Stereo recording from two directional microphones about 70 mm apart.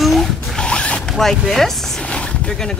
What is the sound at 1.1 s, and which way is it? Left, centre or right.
Speech, centre.